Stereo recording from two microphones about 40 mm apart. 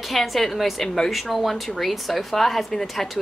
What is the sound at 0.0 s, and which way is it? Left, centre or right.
A woman's voice, centre.